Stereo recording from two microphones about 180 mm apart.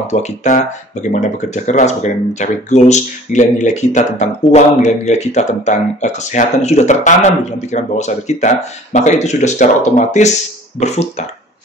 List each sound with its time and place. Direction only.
0.0 s speech: 40° left (ahead or behind)